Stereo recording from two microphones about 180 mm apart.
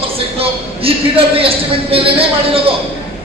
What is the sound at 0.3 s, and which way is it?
A man's voice, 30° right (ahead or behind).